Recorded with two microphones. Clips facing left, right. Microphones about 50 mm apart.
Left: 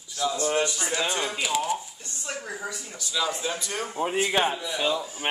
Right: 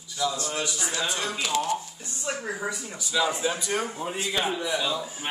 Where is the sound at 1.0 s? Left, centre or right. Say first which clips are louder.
Left 1 dB; left.